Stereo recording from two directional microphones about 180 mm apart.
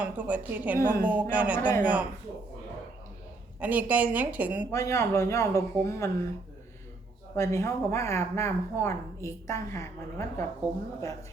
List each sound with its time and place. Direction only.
0.0 s a woman's voice: 10° right (ahead or behind)
3.6 s a woman's voice: 10° right (ahead or behind)
4.7 s speech: 15° left (ahead or behind)
7.3 s speech: 15° left (ahead or behind)